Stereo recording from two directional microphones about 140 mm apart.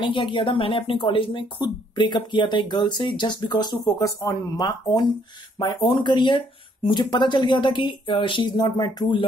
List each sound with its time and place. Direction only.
0.0 s speech: 35° left (ahead or behind)